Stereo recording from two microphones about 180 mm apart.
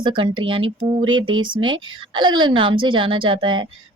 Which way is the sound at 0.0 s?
25° right (ahead or behind).